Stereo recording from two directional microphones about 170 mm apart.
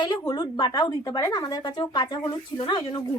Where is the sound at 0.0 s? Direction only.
25° left (ahead or behind).